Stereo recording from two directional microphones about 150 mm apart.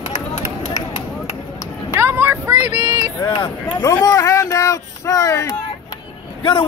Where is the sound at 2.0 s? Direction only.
15° right (ahead or behind).